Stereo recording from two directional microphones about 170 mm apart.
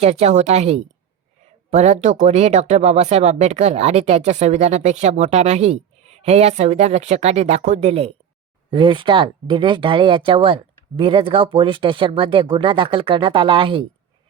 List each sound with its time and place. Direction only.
0.0 s speech: 40° right (ahead or behind)